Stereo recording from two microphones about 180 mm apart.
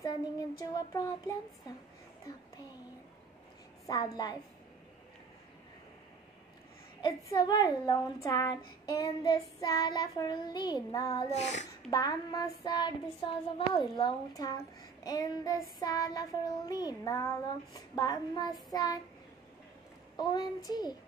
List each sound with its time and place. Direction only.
0.6 s a woman's voice: 20° left (ahead or behind)
3.8 s a woman's voice: 20° left (ahead or behind)
7.0 s a woman's voice: 20° left (ahead or behind)
11.2 s a sound: 40° left (ahead or behind)
11.9 s a woman's voice: 20° left (ahead or behind)
20.2 s a woman's voice: 20° left (ahead or behind)